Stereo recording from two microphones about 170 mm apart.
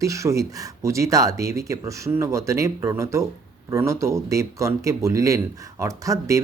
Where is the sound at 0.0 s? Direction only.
20° right (ahead or behind).